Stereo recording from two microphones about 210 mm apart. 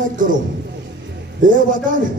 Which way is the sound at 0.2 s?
40° right (ahead or behind).